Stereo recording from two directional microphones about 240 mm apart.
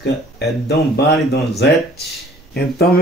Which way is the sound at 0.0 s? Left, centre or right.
Left.